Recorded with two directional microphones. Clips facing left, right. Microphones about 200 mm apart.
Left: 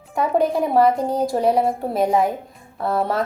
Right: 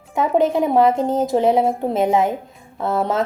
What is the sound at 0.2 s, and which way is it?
Speech, 20° right (ahead or behind).